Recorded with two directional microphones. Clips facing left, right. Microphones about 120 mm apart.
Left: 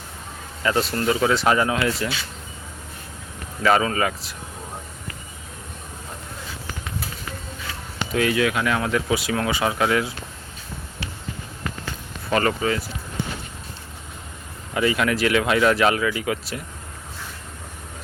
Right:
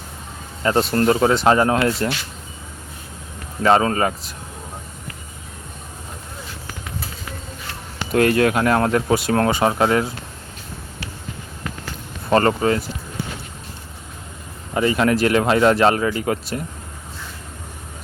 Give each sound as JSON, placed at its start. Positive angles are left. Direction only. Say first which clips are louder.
{"t": 0.9, "sound": "speech", "louder": "right 8 dB", "side_deg": -40}
{"t": 1.3, "sound": "speech", "louder": "right 4 dB", "side_deg": -30}
{"t": 3.6, "sound": "speech", "louder": "right 3 dB", "side_deg": -35}
{"t": 8.1, "sound": "speech", "louder": "right 5 dB", "side_deg": -50}
{"t": 12.3, "sound": "speech", "louder": "right 5 dB", "side_deg": -40}
{"t": 14.7, "sound": "speech", "louder": "right 4 dB", "side_deg": -35}